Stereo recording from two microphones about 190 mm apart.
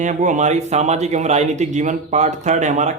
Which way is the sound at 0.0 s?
40° right (ahead or behind).